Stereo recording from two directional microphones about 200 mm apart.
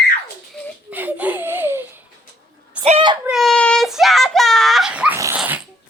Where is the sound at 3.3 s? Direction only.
Centre (ahead or behind).